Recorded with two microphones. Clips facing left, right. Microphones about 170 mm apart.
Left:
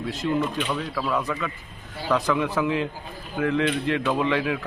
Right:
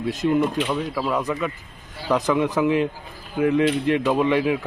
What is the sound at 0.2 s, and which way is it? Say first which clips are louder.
A man's voice: right 4 dB; 25° right (ahead or behind).